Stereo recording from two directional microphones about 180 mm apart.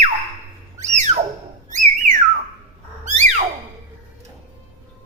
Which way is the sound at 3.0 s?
40° right (ahead or behind).